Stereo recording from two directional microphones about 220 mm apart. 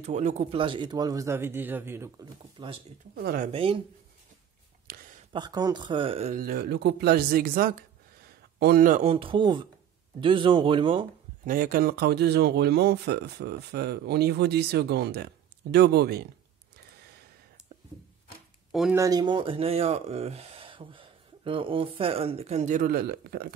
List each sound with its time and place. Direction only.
0.0 s speech: 30° right (ahead or behind)
3.2 s speech: 45° right (ahead or behind)
3.5 s speech: 25° right (ahead or behind)
4.8 s a sound: 40° right (ahead or behind)
5.3 s speech: 20° right (ahead or behind)
6.4 s speech: 45° right (ahead or behind); by 11.1 s 25° right (ahead or behind)
11.4 s speech: 40° right (ahead or behind)
18.7 s speech: centre (ahead or behind)
18.9 s speech: 15° right (ahead or behind); by 23.5 s 45° right (ahead or behind)